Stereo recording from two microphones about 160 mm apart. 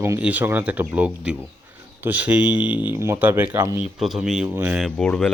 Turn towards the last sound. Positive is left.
turn(degrees=5)  # may be behind; listen again after turning